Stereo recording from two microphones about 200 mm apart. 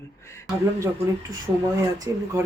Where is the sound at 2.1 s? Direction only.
15° right (ahead or behind).